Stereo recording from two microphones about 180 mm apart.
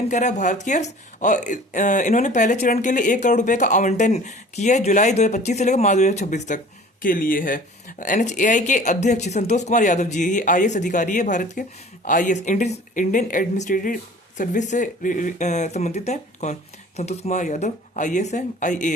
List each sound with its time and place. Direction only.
0.1 s speech: 40° left (ahead or behind)